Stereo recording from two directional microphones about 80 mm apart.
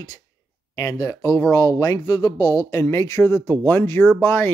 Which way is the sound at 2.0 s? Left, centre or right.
Left.